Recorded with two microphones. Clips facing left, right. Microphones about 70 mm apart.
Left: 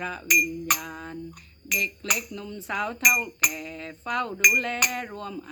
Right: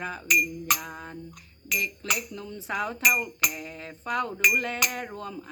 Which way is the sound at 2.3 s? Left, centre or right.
Right.